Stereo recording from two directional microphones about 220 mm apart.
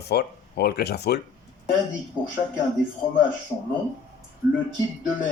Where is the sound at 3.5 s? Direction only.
15° left (ahead or behind).